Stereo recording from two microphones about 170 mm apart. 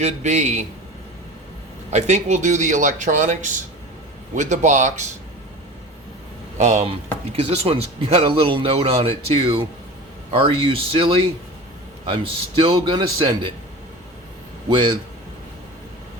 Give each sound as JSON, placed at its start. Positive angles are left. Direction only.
{"t": 0.0, "sound": "speech", "side_deg": -45}
{"t": 1.9, "sound": "speech", "side_deg": -40}
{"t": 6.6, "sound": "speech", "side_deg": -45}
{"t": 14.7, "sound": "a man's voice", "side_deg": -30}